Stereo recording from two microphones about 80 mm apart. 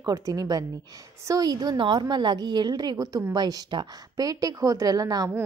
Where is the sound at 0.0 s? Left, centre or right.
Right.